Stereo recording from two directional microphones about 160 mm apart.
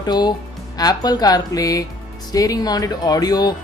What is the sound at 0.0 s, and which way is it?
Speech, 25° left (ahead or behind).